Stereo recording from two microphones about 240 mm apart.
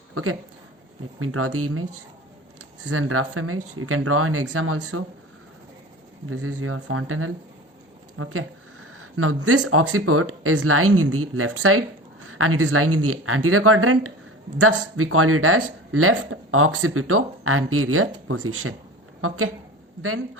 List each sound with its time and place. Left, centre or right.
0.1 s speech: right
2.8 s speech: right
6.2 s speech: right
20.0 s speech: right